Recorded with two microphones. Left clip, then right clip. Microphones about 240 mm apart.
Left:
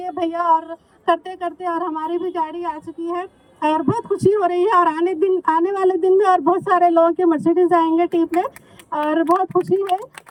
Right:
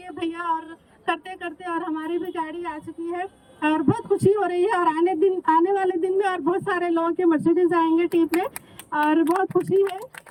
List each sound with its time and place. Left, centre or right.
0.0 s speech: centre